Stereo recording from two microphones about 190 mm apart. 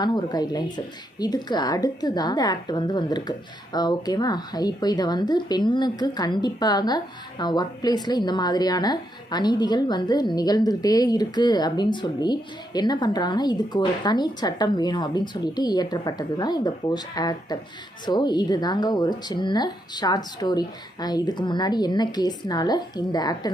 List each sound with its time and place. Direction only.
0.0 s a woman's voice: 20° left (ahead or behind)